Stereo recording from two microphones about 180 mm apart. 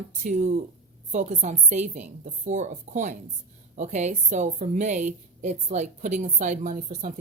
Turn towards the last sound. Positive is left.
turn(degrees=-50)  # may be behind; listen again after turning